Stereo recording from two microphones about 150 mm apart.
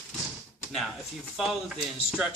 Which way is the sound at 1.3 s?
Centre (ahead or behind).